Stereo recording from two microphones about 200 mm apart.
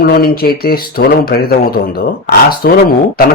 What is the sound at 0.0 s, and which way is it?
Speech, 50° left (ahead or behind).